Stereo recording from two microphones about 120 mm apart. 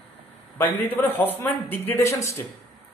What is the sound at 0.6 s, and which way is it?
Speech, 15° left (ahead or behind).